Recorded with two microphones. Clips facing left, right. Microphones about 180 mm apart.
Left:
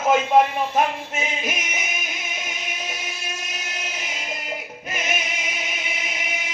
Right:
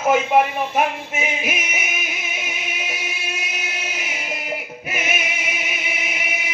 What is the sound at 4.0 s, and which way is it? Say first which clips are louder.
Music: right 3 dB; 10° right (ahead or behind).